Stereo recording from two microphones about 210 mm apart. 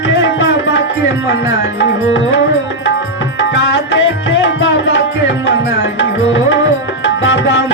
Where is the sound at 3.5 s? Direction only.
60° left (ahead or behind).